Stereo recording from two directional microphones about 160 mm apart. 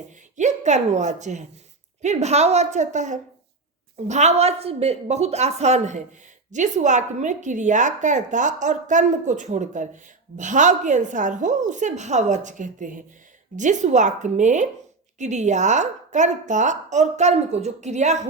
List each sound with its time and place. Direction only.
0.3 s a woman's voice: 50° right (ahead or behind)